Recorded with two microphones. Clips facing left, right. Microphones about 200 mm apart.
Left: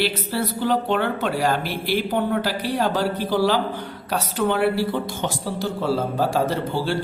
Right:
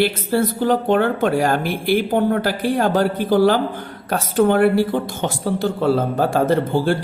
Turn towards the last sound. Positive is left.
turn(degrees=-50)  # may be behind; listen again after turning